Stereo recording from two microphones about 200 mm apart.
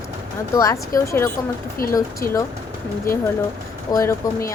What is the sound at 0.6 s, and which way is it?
Speech, 15° left (ahead or behind).